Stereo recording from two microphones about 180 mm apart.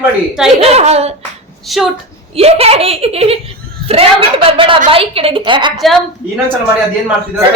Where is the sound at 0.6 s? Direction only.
35° right (ahead or behind).